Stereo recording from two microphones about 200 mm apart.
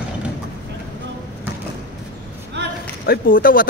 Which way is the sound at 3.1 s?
45° left (ahead or behind).